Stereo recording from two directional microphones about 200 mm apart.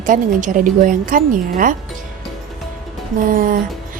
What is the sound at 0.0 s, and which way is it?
Speech, 40° right (ahead or behind).